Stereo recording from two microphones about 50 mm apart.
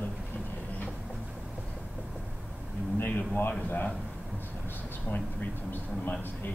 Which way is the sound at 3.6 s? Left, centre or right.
Left.